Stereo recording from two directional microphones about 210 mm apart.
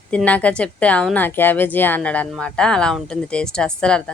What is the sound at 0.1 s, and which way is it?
A woman's voice, 5° left (ahead or behind).